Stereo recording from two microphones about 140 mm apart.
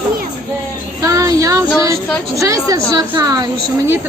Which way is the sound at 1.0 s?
25° right (ahead or behind).